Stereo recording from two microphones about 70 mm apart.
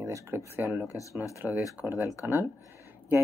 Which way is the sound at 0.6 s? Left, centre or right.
Right.